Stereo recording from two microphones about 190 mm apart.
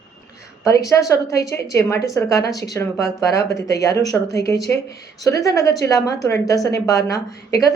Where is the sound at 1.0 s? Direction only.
15° left (ahead or behind).